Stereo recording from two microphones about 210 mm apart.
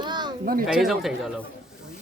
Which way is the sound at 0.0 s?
20° right (ahead or behind).